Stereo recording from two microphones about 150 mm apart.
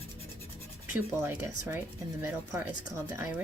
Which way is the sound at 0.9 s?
15° right (ahead or behind).